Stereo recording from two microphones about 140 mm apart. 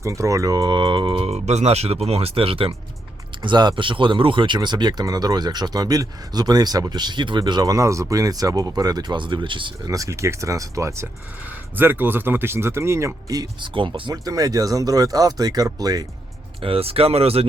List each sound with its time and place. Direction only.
0.0 s speech: 20° right (ahead or behind)
9.9 s speech: 25° right (ahead or behind)
16.6 s speech: 40° right (ahead or behind)